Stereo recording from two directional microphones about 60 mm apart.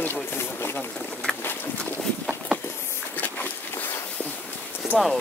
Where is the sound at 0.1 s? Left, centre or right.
Left.